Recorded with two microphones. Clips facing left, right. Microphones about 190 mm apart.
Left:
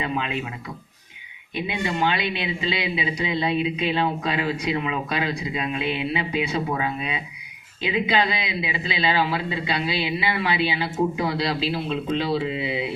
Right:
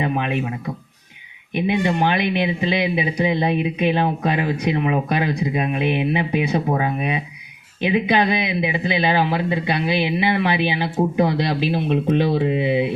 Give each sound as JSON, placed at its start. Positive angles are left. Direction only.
{"t": 0.0, "sound": "speech", "side_deg": -55}
{"t": 1.6, "sound": "speech", "side_deg": -50}